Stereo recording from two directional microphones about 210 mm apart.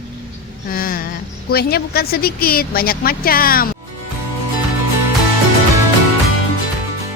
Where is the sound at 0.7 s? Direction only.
45° left (ahead or behind).